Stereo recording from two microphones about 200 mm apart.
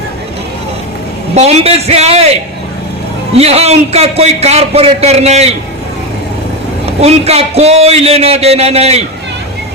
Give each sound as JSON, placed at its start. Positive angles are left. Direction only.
{"t": 1.4, "sound": "a man's voice", "side_deg": -30}
{"t": 7.0, "sound": "a man's voice", "side_deg": -30}